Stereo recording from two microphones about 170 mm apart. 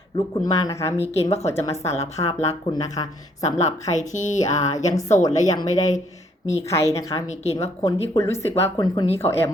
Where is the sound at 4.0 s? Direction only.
45° left (ahead or behind).